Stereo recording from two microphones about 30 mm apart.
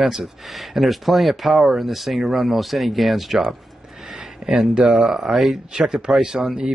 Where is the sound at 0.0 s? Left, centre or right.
Centre.